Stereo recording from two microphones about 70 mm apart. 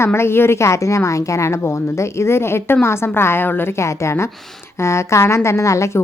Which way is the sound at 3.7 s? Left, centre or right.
Left.